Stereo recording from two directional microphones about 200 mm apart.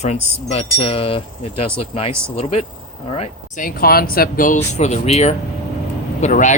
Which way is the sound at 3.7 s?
45° left (ahead or behind).